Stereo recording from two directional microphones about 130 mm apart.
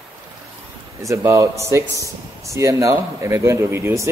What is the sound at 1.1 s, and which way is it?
Speech, 25° right (ahead or behind).